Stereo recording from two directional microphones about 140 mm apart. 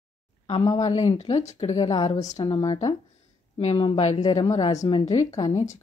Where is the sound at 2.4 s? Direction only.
35° left (ahead or behind).